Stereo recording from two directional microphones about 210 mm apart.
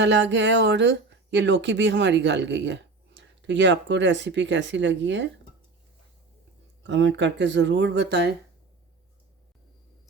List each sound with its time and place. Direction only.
0.0 s speech: 60° right (ahead or behind)
6.8 s speech: 60° right (ahead or behind)